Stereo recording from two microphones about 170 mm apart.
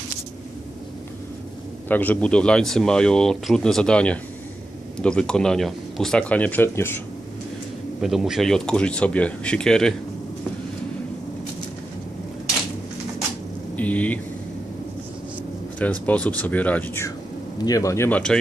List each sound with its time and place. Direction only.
1.9 s speech: 10° left (ahead or behind)
8.0 s speech: centre (ahead or behind)
13.7 s speech: 10° left (ahead or behind)
16.1 s speech: 10° left (ahead or behind)